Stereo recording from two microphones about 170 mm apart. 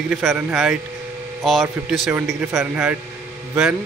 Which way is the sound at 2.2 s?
5° right (ahead or behind).